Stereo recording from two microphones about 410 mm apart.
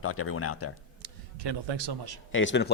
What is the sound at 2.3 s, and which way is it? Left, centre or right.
Speech, left.